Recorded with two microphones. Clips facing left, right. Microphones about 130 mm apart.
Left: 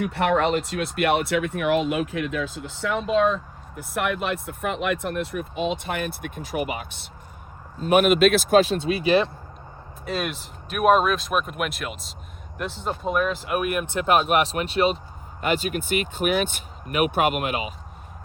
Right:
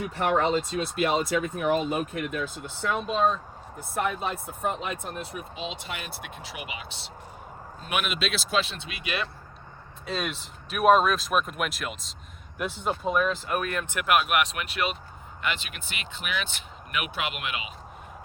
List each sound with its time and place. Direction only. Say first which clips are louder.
0.0 s speech: left 3 dB; 70° left (ahead or behind); by 3.3 s 90° left
3.9 s speech: left 3 dB; 75° left (ahead or behind); by 9.3 s 30° left (ahead or behind)
10.1 s speech: left 3 dB; centre (ahead or behind)
13.9 s speech: left 4 dB; 30° left (ahead or behind)
15.4 s speech: left 9 dB; 45° left (ahead or behind)